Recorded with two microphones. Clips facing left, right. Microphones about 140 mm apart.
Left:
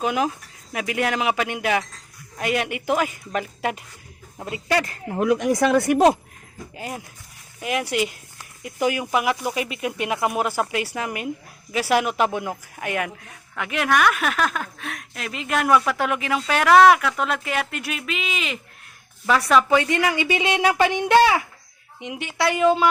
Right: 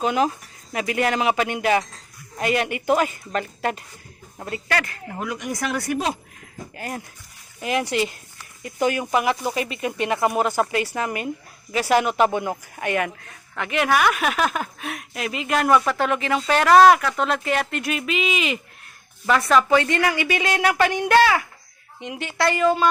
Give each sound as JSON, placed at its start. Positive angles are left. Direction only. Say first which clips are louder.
{"t": 0.0, "sound": "a woman's voice", "louder": "right 2 dB", "side_deg": 5}
{"t": 5.5, "sound": "speech", "louder": "left 7 dB", "side_deg": 25}
{"t": 5.8, "sound": "speech", "louder": "left 8 dB", "side_deg": 50}
{"t": 6.7, "sound": "a woman's voice", "louder": "right 1 dB", "side_deg": 10}